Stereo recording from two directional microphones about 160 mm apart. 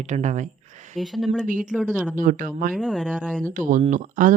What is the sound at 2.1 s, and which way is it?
Speech, 55° right (ahead or behind).